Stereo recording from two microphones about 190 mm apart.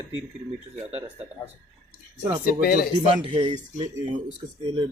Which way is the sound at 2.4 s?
50° left (ahead or behind).